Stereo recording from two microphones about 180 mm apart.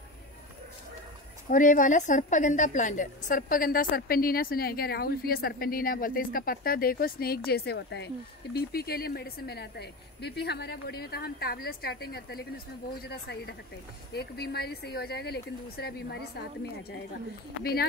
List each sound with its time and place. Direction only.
1.5 s a woman's voice: 45° left (ahead or behind); by 16.3 s 65° left (ahead or behind)